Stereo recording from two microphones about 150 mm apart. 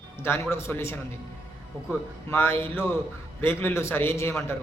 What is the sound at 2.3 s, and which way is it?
A man's voice, 15° left (ahead or behind).